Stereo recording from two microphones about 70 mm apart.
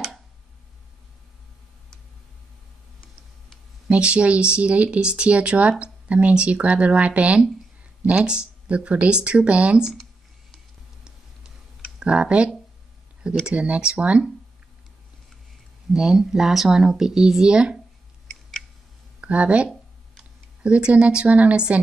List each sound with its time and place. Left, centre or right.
3.9 s speech: centre
12.0 s speech: centre
15.9 s speech: centre
19.2 s speech: centre